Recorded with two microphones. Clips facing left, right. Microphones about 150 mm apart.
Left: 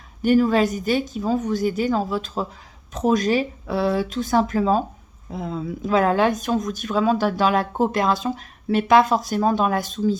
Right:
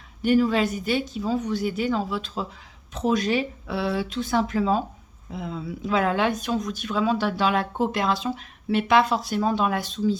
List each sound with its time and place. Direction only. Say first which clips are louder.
0.2 s speech: left 3 dB; 45° left (ahead or behind)